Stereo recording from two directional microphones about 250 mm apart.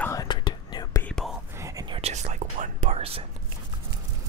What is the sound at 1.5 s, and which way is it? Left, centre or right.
Whispering, centre.